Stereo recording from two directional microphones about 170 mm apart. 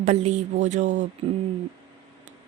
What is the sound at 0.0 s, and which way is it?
A woman's voice, 40° right (ahead or behind).